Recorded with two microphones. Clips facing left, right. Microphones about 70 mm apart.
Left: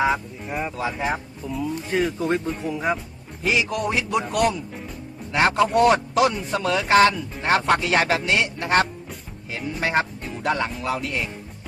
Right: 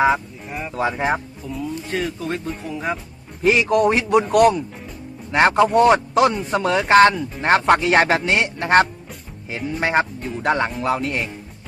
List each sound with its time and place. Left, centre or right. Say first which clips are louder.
0.8 s a man's voice: right 8 dB; right
1.5 s speech: left 1 dB; centre
3.4 s a man's voice: right 7 dB; right
5.3 s speech: right 4 dB; right